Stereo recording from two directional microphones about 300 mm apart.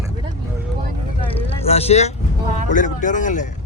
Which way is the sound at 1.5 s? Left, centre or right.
Centre.